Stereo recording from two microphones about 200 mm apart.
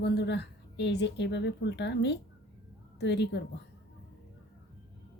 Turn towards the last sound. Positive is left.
turn(degrees=60)  # may be behind; listen again after turning